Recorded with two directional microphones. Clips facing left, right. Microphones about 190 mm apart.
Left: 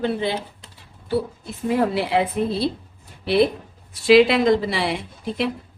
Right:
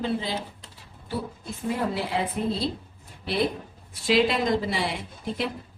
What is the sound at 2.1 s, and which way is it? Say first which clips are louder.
Speech: left 8 dB; 80° left.